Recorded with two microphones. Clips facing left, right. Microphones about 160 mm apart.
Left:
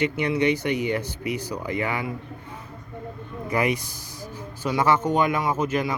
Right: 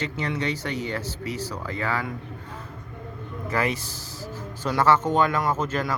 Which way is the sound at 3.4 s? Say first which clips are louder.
Left 2 dB; 15° left (ahead or behind).